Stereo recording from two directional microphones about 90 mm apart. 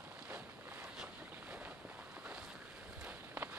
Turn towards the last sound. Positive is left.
turn(degrees=-20)  # may be behind; listen again after turning